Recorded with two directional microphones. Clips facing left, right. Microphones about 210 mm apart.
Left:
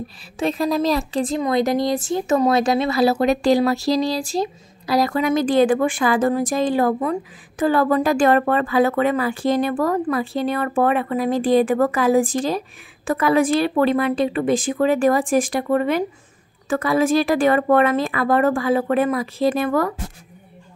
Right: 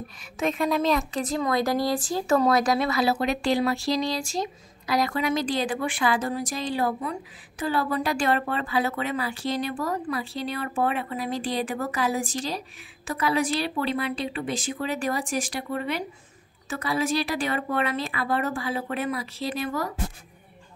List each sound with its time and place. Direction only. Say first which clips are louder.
0.4 s a woman's voice: left 4 dB; 35° left (ahead or behind)
3.0 s speech: left 7 dB; 40° left (ahead or behind)